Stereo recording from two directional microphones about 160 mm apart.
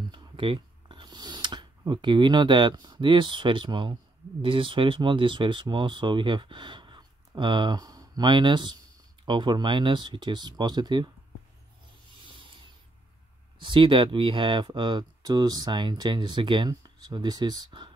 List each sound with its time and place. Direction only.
0.1 s speech: 30° right (ahead or behind)
13.6 s speech: 30° right (ahead or behind)